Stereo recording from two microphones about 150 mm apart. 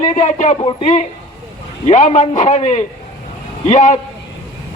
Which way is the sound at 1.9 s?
55° left (ahead or behind).